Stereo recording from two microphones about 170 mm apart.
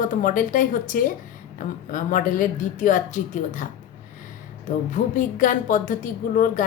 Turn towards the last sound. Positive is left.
turn(degrees=50)  # may be behind; listen again after turning